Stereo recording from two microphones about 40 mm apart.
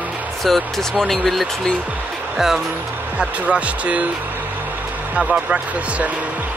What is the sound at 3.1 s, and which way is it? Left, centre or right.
Speech, right.